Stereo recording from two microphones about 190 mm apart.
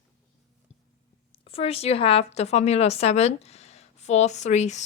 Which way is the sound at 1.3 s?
30° left (ahead or behind).